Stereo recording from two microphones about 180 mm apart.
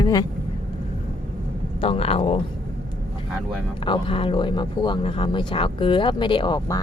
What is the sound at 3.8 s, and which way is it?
Speech, 30° left (ahead or behind).